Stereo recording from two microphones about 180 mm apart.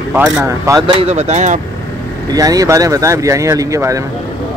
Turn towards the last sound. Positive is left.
turn(degrees=-15)  # may be behind; listen again after turning